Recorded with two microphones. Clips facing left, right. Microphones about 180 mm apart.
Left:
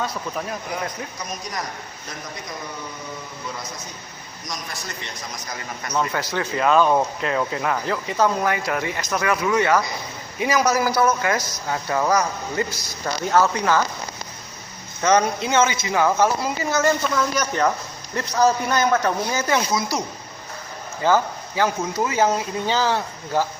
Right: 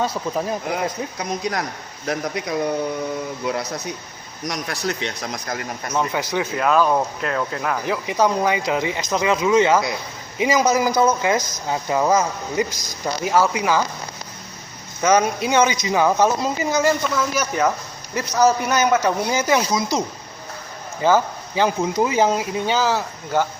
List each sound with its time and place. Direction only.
0.0 s speech: 30° right (ahead or behind)
1.2 s a man's voice: 70° right (ahead or behind)
5.9 s speech: 15° right (ahead or behind)
6.6 s speech: 5° right (ahead or behind)
7.9 s speech: 15° right (ahead or behind)
15.0 s speech: 10° right (ahead or behind)
22.6 s speech: 5° right (ahead or behind)